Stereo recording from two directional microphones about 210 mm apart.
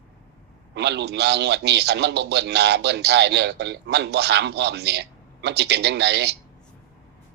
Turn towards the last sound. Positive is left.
turn(degrees=-55)  # may be behind; listen again after turning